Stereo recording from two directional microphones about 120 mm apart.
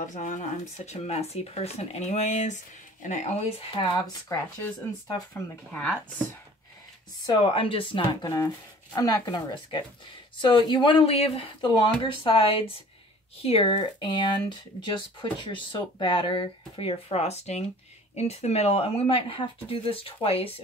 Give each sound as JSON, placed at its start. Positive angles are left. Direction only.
{"t": 0.0, "sound": "speech", "side_deg": 90}
{"t": 3.5, "sound": "speech", "side_deg": 40}
{"t": 5.3, "sound": "speech", "side_deg": 15}
{"t": 7.4, "sound": "speech", "side_deg": 50}